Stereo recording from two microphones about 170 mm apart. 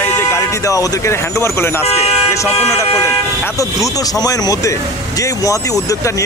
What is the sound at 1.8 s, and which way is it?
Speech, 40° left (ahead or behind).